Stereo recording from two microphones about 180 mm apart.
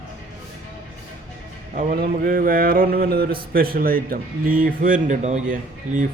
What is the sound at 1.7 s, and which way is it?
Speech, 55° right (ahead or behind).